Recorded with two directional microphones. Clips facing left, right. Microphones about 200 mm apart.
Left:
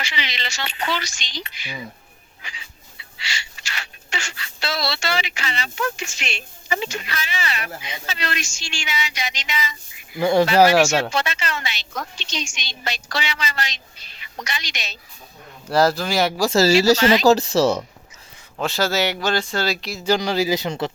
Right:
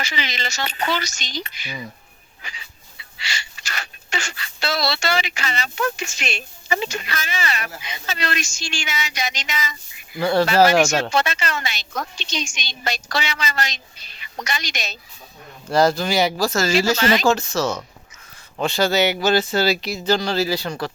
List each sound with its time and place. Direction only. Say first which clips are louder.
0.0 s a woman's voice: right 2 dB; 45° right (ahead or behind)
3.2 s a woman's voice: right 1 dB; 45° right (ahead or behind)
10.2 s speech: left 1 dB; 15° left (ahead or behind)
11.1 s a woman's voice: right 3 dB; 45° right (ahead or behind)
15.7 s speech: right 1 dB; 5° left (ahead or behind)
16.5 s speech: left 4 dB; 35° left (ahead or behind)
18.5 s speech: right 2 dB; centre (ahead or behind)
20.1 s speech: left 1 dB; 15° left (ahead or behind)